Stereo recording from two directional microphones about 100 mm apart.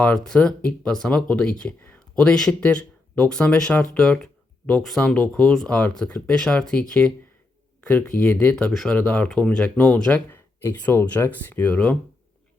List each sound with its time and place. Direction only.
0.0 s speech: 10° left (ahead or behind)